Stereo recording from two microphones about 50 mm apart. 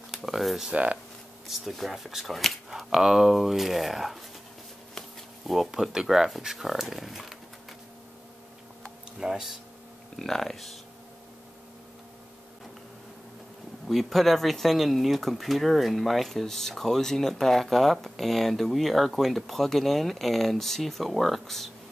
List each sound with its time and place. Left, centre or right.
0.1 s speech: centre
2.9 s speech: centre
5.5 s speech: centre
9.2 s speech: centre
10.1 s speech: centre
13.8 s speech: centre